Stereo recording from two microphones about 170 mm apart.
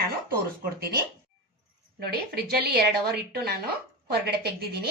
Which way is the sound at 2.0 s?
65° right (ahead or behind).